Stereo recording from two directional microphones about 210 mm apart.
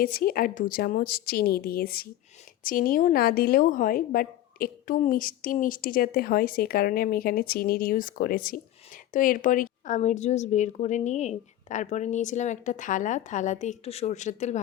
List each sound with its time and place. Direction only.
0.0 s a woman's voice: 45° left (ahead or behind)